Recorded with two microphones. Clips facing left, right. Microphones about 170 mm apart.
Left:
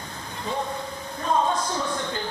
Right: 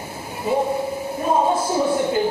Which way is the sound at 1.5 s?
5° right (ahead or behind).